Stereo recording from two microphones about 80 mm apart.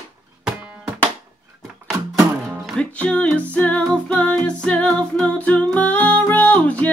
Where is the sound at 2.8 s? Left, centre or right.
Centre.